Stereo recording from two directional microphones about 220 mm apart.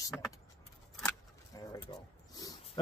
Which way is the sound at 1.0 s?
15° left (ahead or behind).